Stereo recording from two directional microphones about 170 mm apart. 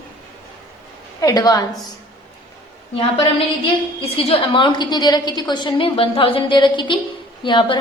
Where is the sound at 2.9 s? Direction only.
30° left (ahead or behind).